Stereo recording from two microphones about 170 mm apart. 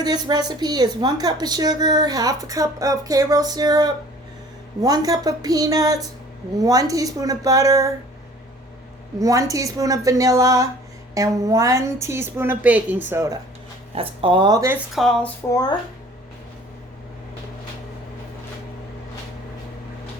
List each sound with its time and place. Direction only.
0.0 s a woman's voice: 25° right (ahead or behind)
9.1 s a woman's voice: 20° right (ahead or behind)
13.9 s a woman's voice: 35° right (ahead or behind)
14.9 s speech: centre (ahead or behind)